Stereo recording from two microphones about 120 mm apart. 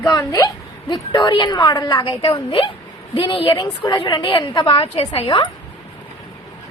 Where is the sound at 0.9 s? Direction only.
40° left (ahead or behind).